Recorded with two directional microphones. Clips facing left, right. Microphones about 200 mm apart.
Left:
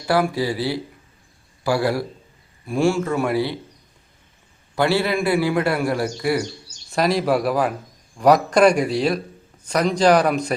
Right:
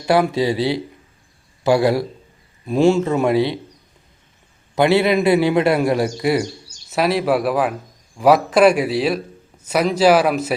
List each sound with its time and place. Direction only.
0.0 s a man's voice: 20° right (ahead or behind)
4.7 s a man's voice: 20° right (ahead or behind)
6.9 s a man's voice: 5° right (ahead or behind)